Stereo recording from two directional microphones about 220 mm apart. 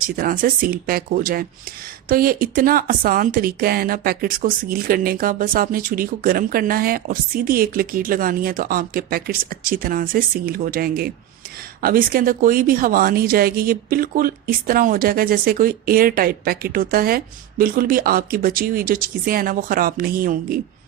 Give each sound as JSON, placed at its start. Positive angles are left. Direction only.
{"t": 0.2, "sound": "speech", "side_deg": -40}